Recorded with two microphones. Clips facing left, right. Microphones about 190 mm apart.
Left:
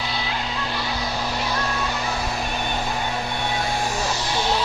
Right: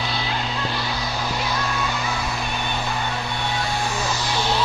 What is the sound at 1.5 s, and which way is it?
Music, 35° left (ahead or behind).